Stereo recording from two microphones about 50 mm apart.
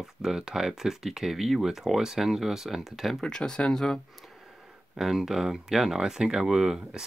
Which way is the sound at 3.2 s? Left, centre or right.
Centre.